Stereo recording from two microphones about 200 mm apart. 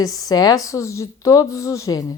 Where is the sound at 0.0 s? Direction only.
20° left (ahead or behind).